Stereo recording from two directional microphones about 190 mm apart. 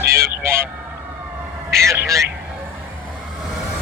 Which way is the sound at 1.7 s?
15° right (ahead or behind).